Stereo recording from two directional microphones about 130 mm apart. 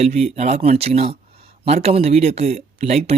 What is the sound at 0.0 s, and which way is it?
Speech, 55° right (ahead or behind).